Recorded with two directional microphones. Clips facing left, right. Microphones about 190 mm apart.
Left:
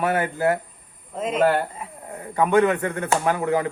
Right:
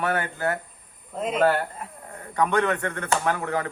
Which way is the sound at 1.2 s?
Centre (ahead or behind).